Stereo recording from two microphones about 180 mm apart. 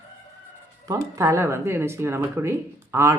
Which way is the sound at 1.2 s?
15° right (ahead or behind).